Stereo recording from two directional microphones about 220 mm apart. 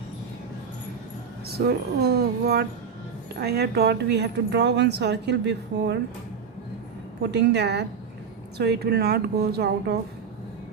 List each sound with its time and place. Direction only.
1.5 s speech: 45° right (ahead or behind)
7.2 s speech: 50° right (ahead or behind)